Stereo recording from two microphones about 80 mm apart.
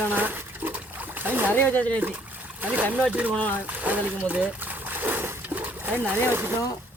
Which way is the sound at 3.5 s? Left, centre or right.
Centre.